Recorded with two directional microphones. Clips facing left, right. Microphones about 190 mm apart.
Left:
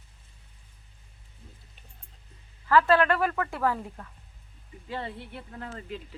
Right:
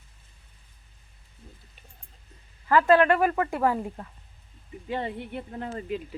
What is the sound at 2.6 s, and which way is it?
Speech, 15° right (ahead or behind).